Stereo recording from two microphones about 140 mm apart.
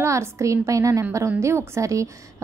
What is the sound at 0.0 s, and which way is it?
A woman's voice, 20° right (ahead or behind).